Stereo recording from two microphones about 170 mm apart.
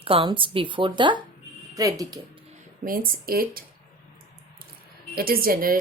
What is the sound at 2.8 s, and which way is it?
Speech, 55° right (ahead or behind).